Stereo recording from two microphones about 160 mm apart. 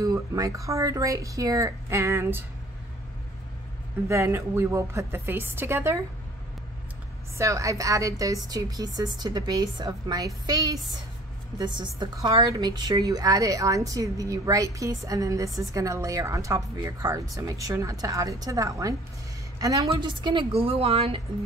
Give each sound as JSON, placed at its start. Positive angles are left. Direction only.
{"t": 0.0, "sound": "a woman's voice", "side_deg": -20}
{"t": 4.1, "sound": "a woman's voice", "side_deg": -15}
{"t": 7.3, "sound": "a woman's voice", "side_deg": -20}